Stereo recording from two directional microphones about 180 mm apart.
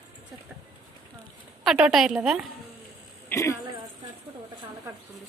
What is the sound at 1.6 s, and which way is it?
Speech, centre (ahead or behind).